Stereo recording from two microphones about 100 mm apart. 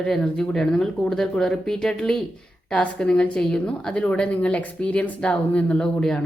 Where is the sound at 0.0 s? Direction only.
5° left (ahead or behind).